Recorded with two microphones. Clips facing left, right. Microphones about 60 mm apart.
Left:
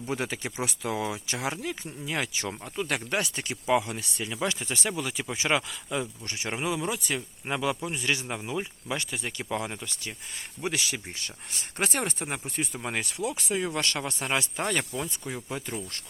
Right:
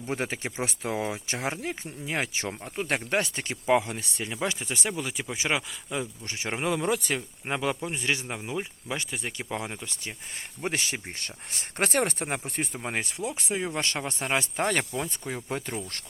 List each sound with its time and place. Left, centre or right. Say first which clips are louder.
0.1 s speech: right 1 dB; right; by 6.1 s centre
6.2 s speech: right 1 dB; right
6.7 s speech: right 4 dB; right
7.2 s speech: even; centre
10.6 s speech: even; right
12.8 s speech: left 1 dB; right